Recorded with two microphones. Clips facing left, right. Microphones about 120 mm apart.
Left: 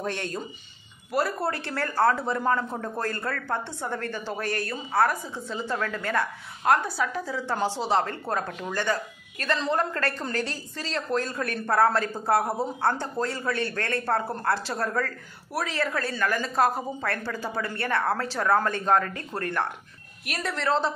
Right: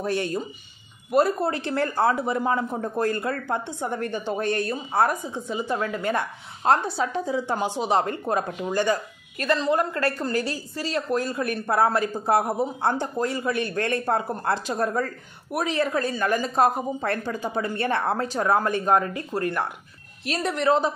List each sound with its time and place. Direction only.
0.0 s a woman's voice: 10° right (ahead or behind)
1.1 s a woman's voice: 20° right (ahead or behind)
20.2 s a woman's voice: 20° right (ahead or behind)